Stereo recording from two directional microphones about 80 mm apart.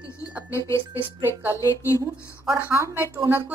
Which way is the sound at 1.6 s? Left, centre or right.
Left.